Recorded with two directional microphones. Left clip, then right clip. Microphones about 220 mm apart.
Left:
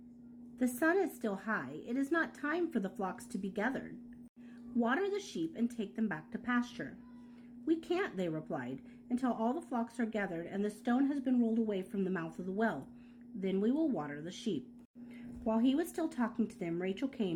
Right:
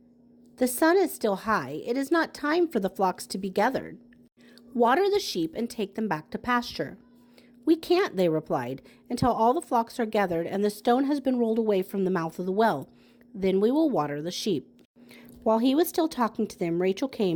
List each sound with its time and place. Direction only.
0.6 s a woman's voice: 35° right (ahead or behind)